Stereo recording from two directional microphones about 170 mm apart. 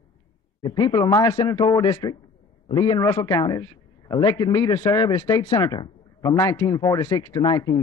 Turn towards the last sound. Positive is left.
turn(degrees=25)  # may be behind; listen again after turning